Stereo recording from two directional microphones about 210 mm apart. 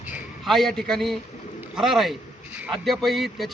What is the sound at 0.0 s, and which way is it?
A man's voice, 5° right (ahead or behind).